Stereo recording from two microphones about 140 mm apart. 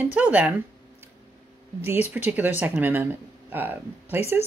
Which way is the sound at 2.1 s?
10° right (ahead or behind).